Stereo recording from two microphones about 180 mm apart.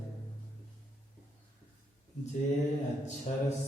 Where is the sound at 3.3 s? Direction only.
40° left (ahead or behind).